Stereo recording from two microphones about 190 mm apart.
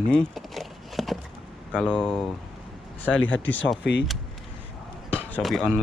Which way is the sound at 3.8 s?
65° left (ahead or behind).